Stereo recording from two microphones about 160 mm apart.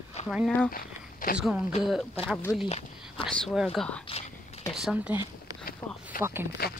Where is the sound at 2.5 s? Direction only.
20° left (ahead or behind).